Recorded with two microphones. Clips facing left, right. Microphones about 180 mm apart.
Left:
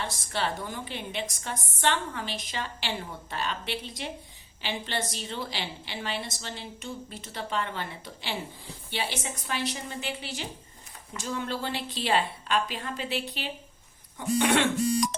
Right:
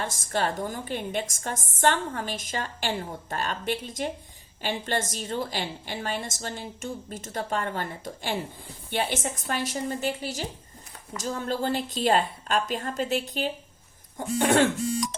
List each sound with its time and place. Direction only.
0.0 s a woman's voice: 45° right (ahead or behind)